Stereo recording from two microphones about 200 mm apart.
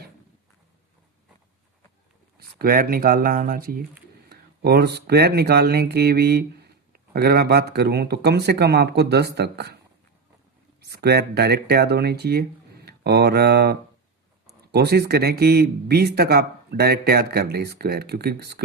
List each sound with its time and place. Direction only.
2.6 s speech: 45° right (ahead or behind)
10.8 s speech: 55° right (ahead or behind)